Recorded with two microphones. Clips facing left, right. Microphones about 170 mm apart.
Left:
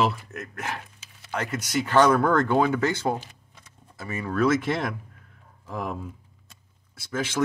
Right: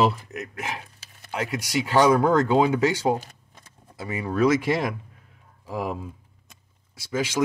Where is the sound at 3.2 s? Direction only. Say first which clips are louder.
Right 2 dB; 45° right (ahead or behind).